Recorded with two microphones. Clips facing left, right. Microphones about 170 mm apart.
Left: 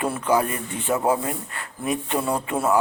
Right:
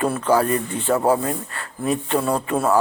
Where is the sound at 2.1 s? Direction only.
20° left (ahead or behind).